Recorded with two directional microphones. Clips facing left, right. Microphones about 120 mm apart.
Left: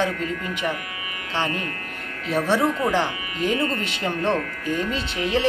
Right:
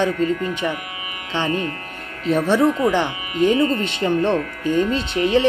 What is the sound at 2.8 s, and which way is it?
Speech, 20° right (ahead or behind).